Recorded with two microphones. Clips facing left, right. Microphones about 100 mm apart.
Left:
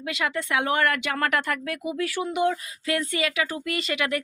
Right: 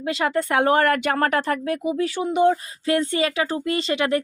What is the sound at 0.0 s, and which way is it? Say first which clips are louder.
Speech: right 6 dB; 35° right (ahead or behind).